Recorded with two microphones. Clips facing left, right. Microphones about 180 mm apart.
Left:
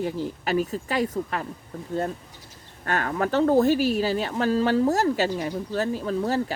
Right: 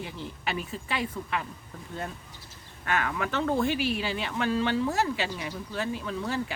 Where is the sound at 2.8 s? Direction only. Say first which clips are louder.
Left 4 dB; 40° left (ahead or behind).